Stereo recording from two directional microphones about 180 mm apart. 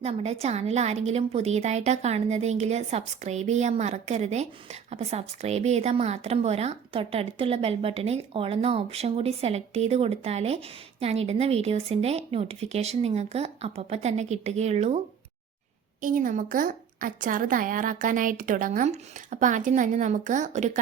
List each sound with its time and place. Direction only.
0.0 s a woman's voice: 35° right (ahead or behind)
16.0 s a woman's voice: 50° right (ahead or behind)